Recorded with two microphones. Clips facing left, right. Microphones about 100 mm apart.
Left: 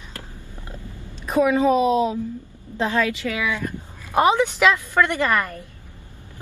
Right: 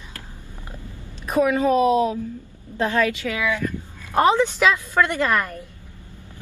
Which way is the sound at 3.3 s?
15° right (ahead or behind).